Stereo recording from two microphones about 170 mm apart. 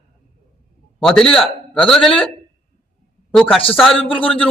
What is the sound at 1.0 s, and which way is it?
A man's voice, 5° left (ahead or behind).